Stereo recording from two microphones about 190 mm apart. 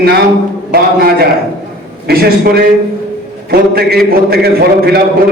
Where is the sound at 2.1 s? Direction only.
55° right (ahead or behind).